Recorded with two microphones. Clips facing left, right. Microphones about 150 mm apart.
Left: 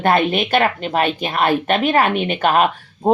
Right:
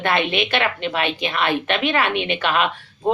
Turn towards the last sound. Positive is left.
turn(degrees=45)  # may be behind; listen again after turning